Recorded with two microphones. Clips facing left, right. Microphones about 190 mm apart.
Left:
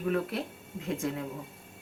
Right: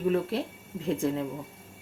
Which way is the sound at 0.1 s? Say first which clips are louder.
Even; 30° right (ahead or behind).